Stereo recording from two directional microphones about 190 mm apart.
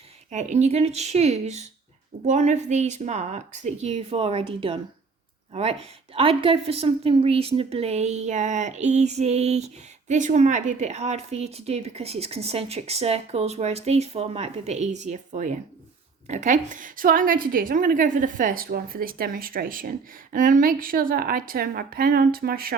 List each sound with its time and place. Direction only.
0.3 s a woman's voice: 40° right (ahead or behind)
6.1 s a woman's voice: 30° right (ahead or behind); by 22.7 s 50° right (ahead or behind)